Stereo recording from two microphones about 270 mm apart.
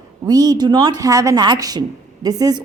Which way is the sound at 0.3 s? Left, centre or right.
Centre.